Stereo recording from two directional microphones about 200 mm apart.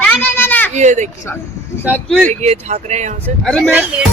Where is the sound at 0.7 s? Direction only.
35° right (ahead or behind).